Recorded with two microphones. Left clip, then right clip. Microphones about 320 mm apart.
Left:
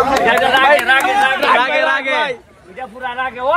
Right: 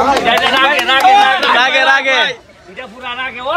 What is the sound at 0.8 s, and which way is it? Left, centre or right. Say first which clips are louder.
Speech: right 4 dB; centre.